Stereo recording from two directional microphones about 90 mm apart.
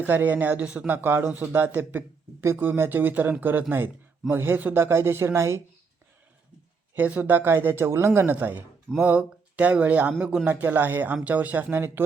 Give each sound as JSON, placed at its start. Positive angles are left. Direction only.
{"t": 0.0, "sound": "a man's voice", "side_deg": -20}
{"t": 0.9, "sound": "a man's voice", "side_deg": -25}
{"t": 6.9, "sound": "a man's voice", "side_deg": -20}